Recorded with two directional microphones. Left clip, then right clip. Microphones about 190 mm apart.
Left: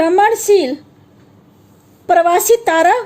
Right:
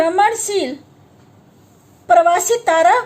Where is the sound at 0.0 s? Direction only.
40° left (ahead or behind).